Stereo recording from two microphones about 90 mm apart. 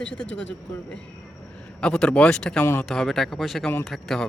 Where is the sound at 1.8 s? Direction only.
10° left (ahead or behind).